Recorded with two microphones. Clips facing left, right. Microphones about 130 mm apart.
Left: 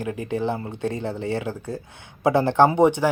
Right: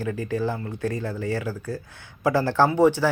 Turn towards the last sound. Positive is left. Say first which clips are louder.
# left 2 dB
turn(degrees=20)  # may be behind; listen again after turning